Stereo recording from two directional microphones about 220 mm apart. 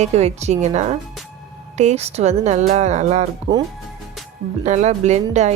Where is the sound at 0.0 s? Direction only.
30° right (ahead or behind).